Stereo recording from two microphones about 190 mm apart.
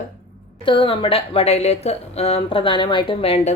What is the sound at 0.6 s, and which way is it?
A woman's voice, 25° left (ahead or behind).